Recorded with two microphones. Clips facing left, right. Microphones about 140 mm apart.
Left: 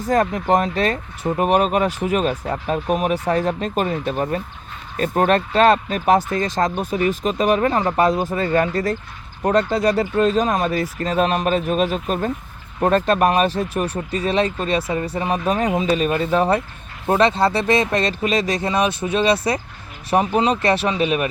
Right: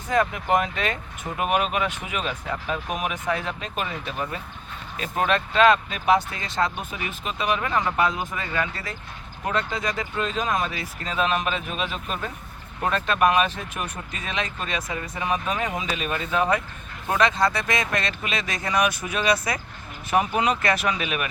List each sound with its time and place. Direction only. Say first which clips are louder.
0.0 s speech: left 5 dB; 40° left (ahead or behind)